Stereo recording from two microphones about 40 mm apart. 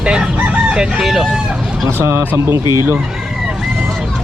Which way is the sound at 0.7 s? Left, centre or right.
Right.